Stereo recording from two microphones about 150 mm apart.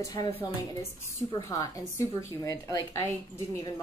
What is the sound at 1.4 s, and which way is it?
A woman's voice, 20° left (ahead or behind).